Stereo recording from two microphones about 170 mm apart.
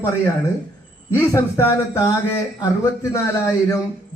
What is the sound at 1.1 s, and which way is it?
A man's voice, 15° left (ahead or behind).